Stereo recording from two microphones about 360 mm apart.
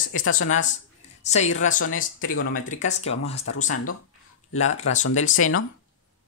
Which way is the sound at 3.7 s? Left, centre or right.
Left.